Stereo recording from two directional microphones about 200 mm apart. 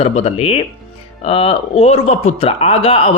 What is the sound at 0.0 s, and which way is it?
Speech, 30° left (ahead or behind).